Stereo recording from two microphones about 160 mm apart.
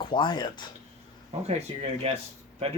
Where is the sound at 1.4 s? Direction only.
40° right (ahead or behind).